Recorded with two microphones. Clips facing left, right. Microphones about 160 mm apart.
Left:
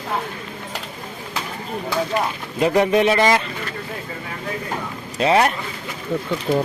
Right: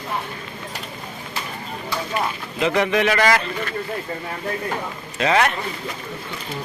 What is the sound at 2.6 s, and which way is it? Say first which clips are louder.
Speech: left 3 dB; 35° left (ahead or behind).